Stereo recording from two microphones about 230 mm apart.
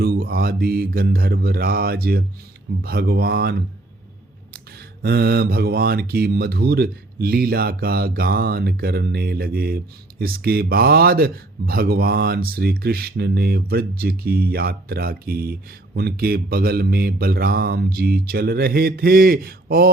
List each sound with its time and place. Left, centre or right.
0.0 s speech: right
5.0 s speech: right